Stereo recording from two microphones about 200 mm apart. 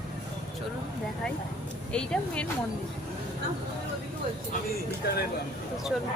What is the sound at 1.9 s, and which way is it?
Speech, 5° left (ahead or behind).